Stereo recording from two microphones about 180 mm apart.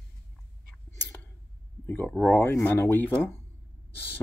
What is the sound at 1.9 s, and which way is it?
Speech, 10° left (ahead or behind).